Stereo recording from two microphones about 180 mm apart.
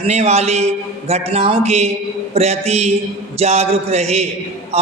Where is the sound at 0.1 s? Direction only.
35° right (ahead or behind).